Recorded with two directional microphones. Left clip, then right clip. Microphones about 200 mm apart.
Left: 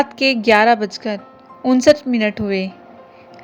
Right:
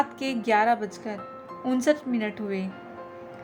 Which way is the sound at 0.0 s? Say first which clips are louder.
Left 12 dB; 35° left (ahead or behind).